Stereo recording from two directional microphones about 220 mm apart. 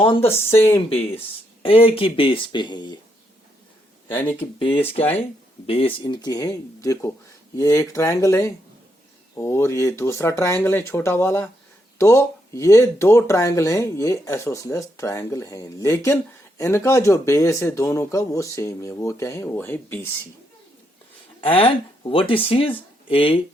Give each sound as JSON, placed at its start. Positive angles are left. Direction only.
{"t": 0.0, "sound": "speech", "side_deg": 25}
{"t": 4.1, "sound": "speech", "side_deg": 10}
{"t": 4.4, "sound": "speech", "side_deg": 25}
{"t": 21.4, "sound": "speech", "side_deg": 25}